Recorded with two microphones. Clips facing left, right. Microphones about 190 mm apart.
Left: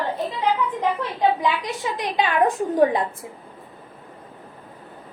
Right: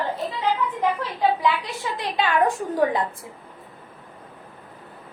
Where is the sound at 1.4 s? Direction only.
20° left (ahead or behind).